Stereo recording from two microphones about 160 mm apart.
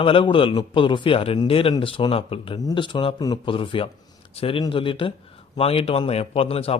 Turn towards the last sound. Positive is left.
turn(degrees=35)  # may be behind; listen again after turning